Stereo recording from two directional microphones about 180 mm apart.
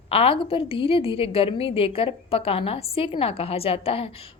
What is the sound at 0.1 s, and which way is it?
A woman's voice, 30° left (ahead or behind).